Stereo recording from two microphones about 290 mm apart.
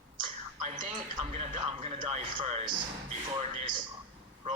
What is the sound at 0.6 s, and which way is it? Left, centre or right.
Speech, centre.